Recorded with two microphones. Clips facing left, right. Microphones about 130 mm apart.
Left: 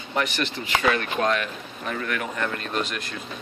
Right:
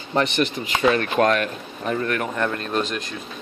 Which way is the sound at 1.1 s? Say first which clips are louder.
Right 5 dB; 50° right (ahead or behind).